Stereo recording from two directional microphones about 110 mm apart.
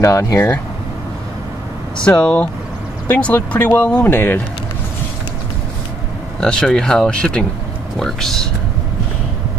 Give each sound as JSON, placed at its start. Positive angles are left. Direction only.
{"t": 0.0, "sound": "speech", "side_deg": 25}
{"t": 2.2, "sound": "speech", "side_deg": 10}
{"t": 3.3, "sound": "speech", "side_deg": 20}
{"t": 6.4, "sound": "speech", "side_deg": 5}